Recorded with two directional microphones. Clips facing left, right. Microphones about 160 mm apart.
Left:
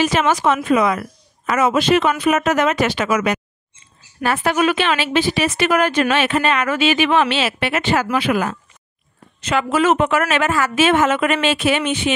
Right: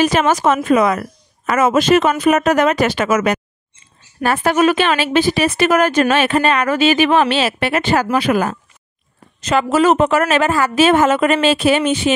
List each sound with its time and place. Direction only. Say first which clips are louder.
0.0 s a woman's voice: right 2 dB; 45° right (ahead or behind)